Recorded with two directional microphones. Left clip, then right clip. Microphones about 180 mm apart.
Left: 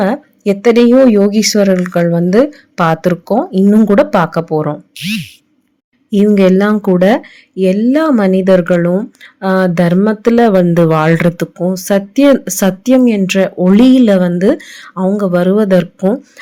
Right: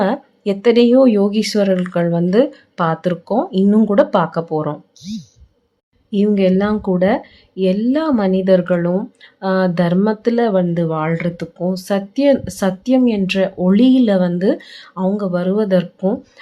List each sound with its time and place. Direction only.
0.0 s speech: 15° left (ahead or behind)
6.1 s speech: 20° left (ahead or behind)
7.5 s speech: 15° left (ahead or behind); by 11.4 s 35° left (ahead or behind)
11.5 s speech: 15° left (ahead or behind)